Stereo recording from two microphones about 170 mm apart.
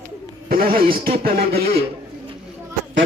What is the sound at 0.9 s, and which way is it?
Speech, 65° right (ahead or behind).